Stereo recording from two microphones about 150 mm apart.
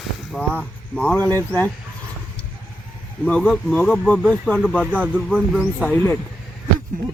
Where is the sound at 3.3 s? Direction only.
5° left (ahead or behind).